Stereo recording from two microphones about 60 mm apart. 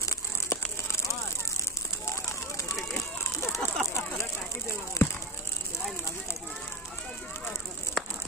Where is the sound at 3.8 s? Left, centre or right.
Left.